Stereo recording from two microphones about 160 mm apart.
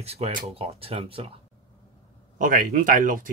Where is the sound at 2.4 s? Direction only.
55° right (ahead or behind).